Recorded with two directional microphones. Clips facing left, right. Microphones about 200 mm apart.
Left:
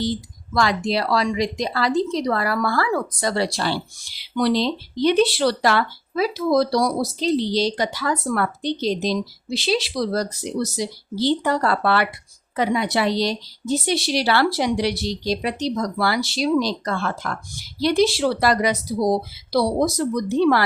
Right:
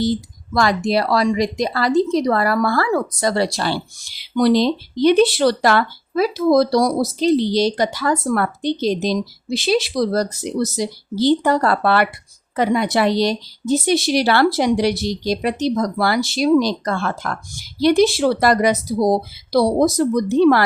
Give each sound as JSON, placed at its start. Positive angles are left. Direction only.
{"t": 0.5, "sound": "speech", "side_deg": -45}